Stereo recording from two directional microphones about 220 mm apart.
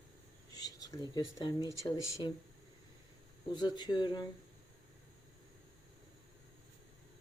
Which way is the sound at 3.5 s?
20° left (ahead or behind).